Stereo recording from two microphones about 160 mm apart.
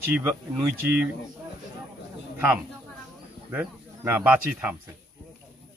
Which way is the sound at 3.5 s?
10° right (ahead or behind).